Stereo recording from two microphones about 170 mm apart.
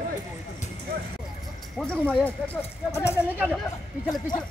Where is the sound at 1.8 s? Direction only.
5° left (ahead or behind); by 4.4 s 25° left (ahead or behind).